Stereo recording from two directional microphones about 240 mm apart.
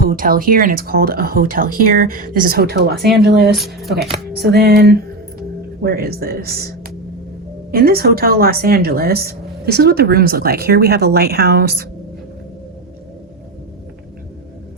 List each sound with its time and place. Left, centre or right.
0.0 s speech: right
5.4 s music: right
7.7 s speech: right